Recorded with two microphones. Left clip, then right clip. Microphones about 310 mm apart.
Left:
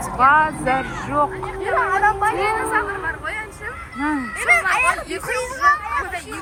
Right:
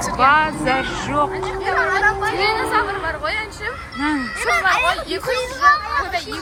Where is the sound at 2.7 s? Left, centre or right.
Centre.